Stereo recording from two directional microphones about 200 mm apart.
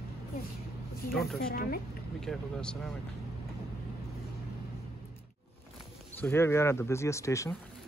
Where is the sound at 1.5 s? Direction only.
45° left (ahead or behind).